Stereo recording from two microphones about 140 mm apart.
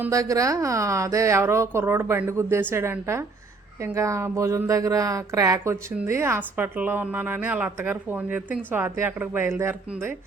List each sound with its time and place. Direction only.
0.0 s a woman's voice: 25° right (ahead or behind)